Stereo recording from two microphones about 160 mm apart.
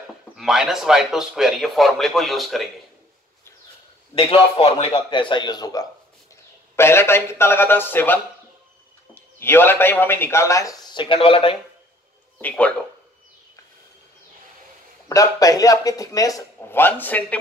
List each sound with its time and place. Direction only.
0.4 s speech: centre (ahead or behind)
4.1 s a man's voice: 35° left (ahead or behind)
12.4 s speech: 10° left (ahead or behind)
15.0 s speech: 20° left (ahead or behind)